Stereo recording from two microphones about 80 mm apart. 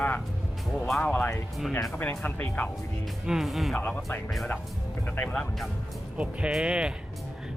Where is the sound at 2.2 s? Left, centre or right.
Left.